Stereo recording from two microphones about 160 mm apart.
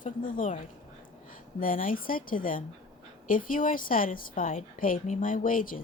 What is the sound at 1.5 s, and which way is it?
A woman's voice, 60° left (ahead or behind).